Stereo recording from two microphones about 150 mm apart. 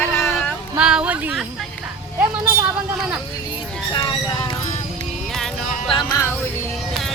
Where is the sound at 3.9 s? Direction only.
30° left (ahead or behind).